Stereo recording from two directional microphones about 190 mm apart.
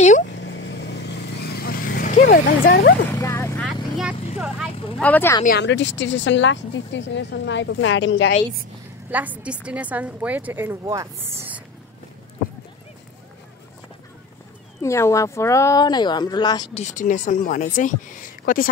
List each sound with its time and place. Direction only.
0.0 s speech: 40° left (ahead or behind)
0.4 s vehicle: 70° left (ahead or behind); by 2.2 s 45° left (ahead or behind)
2.3 s speech: 55° left (ahead or behind)
3.2 s vehicle: 15° left (ahead or behind)
5.0 s speech: 10° left (ahead or behind)
5.6 s speech: 70° left (ahead or behind)
9.1 s a woman's voice: 10° right (ahead or behind)
14.8 s speech: 15° left (ahead or behind)
16.8 s speech: 40° left (ahead or behind)